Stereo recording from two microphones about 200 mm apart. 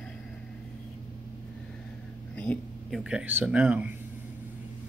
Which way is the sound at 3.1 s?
10° right (ahead or behind).